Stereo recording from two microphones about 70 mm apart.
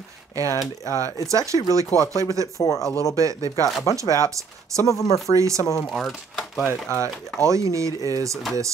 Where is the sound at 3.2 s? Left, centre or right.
Right.